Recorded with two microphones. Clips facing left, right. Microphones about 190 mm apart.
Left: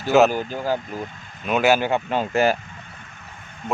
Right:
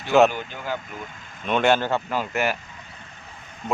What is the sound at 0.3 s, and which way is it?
Speech, 40° left (ahead or behind).